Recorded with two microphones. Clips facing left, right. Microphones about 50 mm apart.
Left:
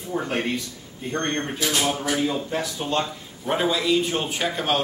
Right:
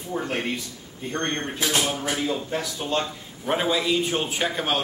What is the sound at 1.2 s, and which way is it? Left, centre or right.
Speech, right.